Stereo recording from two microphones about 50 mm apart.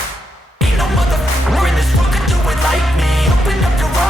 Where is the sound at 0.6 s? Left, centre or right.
Centre.